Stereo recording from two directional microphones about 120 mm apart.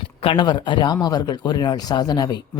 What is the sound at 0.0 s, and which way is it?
Speech, 45° left (ahead or behind).